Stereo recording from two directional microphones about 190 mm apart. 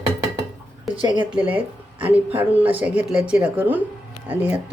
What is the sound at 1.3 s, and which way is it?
Speech, 5° right (ahead or behind).